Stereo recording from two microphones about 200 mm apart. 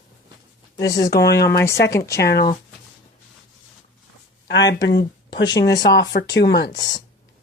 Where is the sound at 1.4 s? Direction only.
15° left (ahead or behind).